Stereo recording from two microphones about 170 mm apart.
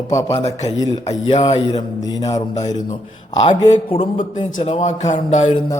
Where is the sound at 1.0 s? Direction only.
35° left (ahead or behind).